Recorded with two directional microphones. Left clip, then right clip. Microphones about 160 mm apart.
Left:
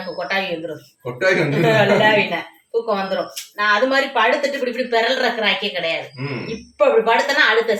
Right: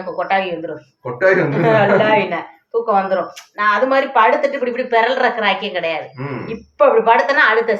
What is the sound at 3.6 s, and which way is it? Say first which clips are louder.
A woman's voice: right 2 dB; 30° left (ahead or behind).